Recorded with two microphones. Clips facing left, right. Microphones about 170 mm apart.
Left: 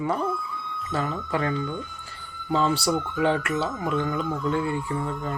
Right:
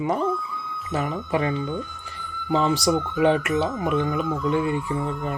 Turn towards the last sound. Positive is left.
turn(degrees=-20)  # may be behind; listen again after turning